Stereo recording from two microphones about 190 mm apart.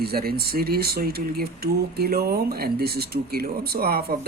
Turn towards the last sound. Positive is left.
turn(degrees=-55)  # may be behind; listen again after turning